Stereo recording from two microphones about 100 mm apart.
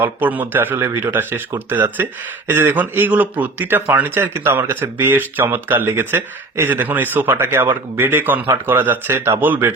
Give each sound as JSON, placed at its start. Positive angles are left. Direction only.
{"t": 0.0, "sound": "speech", "side_deg": -20}